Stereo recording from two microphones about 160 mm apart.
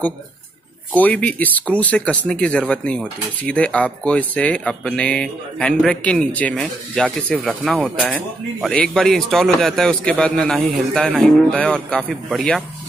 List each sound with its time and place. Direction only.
0.9 s a man's voice: 10° left (ahead or behind)